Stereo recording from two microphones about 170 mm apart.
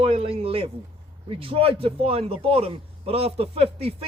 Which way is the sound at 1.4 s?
35° right (ahead or behind).